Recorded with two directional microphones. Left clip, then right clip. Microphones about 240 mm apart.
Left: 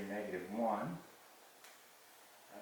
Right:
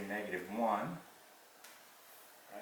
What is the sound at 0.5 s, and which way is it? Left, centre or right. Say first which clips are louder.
Speech: right 3 dB; centre.